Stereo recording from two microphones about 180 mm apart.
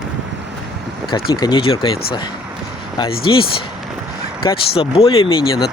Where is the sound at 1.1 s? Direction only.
25° left (ahead or behind).